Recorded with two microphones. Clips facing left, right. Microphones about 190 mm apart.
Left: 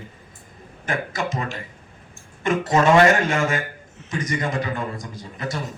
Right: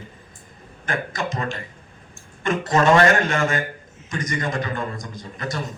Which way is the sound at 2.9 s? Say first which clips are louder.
Left 1 dB; 10° left (ahead or behind).